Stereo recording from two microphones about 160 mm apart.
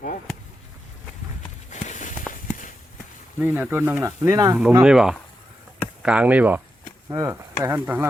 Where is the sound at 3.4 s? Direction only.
10° right (ahead or behind).